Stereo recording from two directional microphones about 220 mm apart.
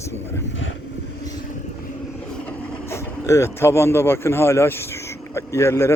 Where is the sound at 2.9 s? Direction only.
15° left (ahead or behind).